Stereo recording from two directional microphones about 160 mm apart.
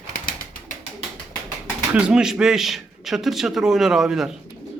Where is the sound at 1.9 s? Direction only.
5° right (ahead or behind).